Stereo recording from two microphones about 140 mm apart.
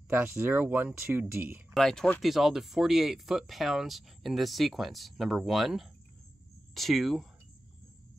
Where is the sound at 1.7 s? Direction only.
5° left (ahead or behind).